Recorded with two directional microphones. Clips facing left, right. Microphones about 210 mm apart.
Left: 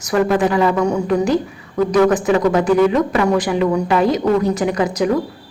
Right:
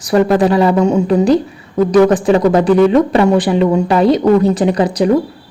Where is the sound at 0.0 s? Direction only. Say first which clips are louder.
Right 4 dB; 35° right (ahead or behind).